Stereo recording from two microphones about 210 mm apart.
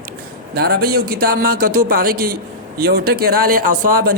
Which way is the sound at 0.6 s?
45° right (ahead or behind).